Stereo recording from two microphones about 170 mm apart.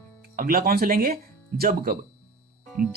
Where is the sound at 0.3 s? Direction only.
60° right (ahead or behind).